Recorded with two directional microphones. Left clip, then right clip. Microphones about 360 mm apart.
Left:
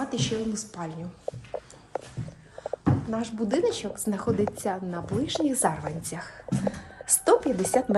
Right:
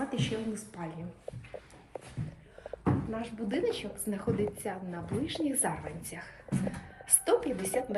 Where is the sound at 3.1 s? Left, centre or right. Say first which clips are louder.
Left 7 dB; centre.